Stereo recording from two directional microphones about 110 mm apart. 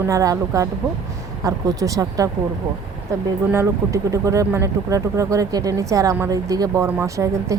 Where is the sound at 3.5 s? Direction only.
25° right (ahead or behind).